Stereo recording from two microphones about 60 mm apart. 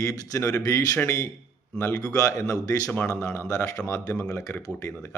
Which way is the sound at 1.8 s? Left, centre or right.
Left.